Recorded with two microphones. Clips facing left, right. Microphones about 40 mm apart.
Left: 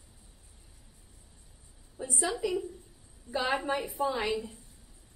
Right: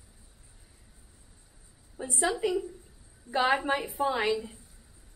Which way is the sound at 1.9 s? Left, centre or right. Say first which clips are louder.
Right 3 dB; right.